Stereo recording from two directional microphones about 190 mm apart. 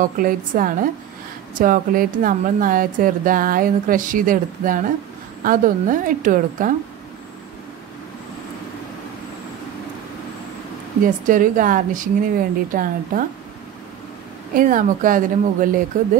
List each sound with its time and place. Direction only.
0.0 s a woman's voice: 45° right (ahead or behind)
11.2 s a woman's voice: 45° right (ahead or behind)
14.5 s a woman's voice: 45° right (ahead or behind)